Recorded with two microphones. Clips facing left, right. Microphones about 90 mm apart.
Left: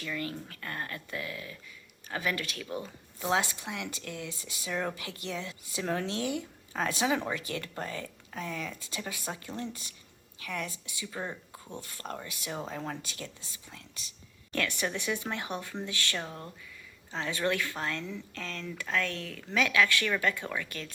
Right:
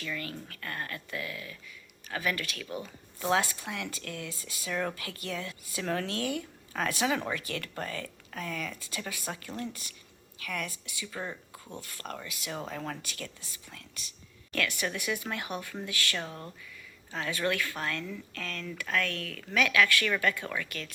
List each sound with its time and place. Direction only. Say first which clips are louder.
0.0 s speech: left 2 dB; 15° left (ahead or behind)
12.5 s speech: even; 15° left (ahead or behind)
16.1 s speech: even; 10° left (ahead or behind)
17.2 s speech: even; 20° left (ahead or behind)